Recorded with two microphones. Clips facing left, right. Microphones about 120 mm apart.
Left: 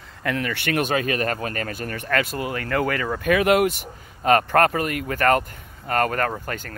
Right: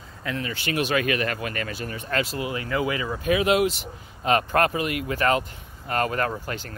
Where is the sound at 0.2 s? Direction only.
75° left (ahead or behind); by 0.9 s 55° left (ahead or behind).